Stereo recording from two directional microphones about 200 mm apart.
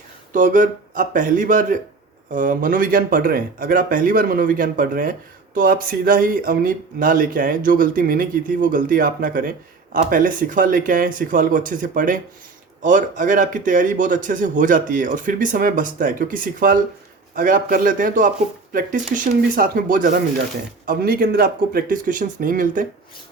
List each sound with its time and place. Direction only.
0.3 s speech: 40° right (ahead or behind)